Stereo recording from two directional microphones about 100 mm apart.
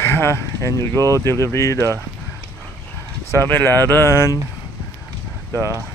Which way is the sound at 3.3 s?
20° left (ahead or behind).